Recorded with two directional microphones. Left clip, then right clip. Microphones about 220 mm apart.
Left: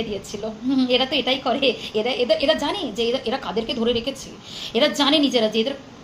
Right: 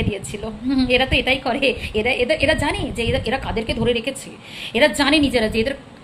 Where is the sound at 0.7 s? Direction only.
15° right (ahead or behind).